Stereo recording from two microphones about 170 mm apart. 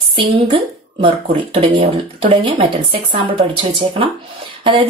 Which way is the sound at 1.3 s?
30° right (ahead or behind).